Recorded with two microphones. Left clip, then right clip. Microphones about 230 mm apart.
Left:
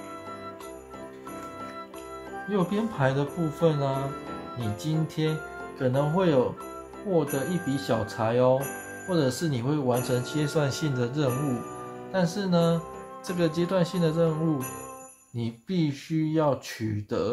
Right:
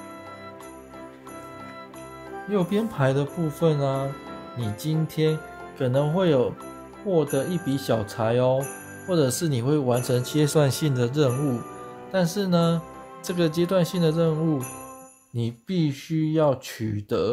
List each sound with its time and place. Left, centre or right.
2.5 s speech: right
15.3 s speech: right